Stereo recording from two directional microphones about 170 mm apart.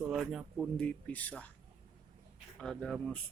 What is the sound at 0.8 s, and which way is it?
Speech, 10° left (ahead or behind).